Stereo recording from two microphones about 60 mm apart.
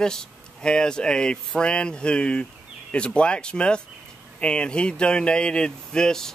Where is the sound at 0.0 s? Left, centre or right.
Centre.